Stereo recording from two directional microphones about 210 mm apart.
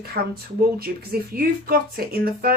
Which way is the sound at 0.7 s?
45° right (ahead or behind).